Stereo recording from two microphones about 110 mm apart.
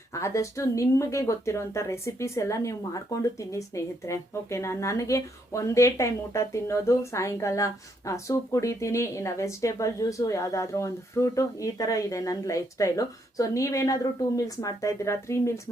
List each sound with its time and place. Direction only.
0.1 s speech: 25° left (ahead or behind)